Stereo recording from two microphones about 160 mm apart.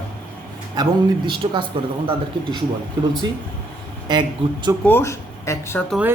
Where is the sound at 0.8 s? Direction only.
30° right (ahead or behind).